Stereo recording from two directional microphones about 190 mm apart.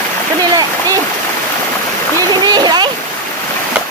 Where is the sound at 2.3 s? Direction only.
20° right (ahead or behind).